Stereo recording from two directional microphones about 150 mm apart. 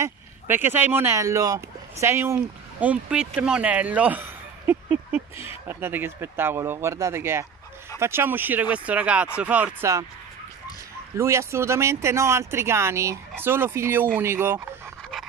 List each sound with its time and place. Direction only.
0.0 s speech: 15° right (ahead or behind)
11.1 s speech: 20° right (ahead or behind)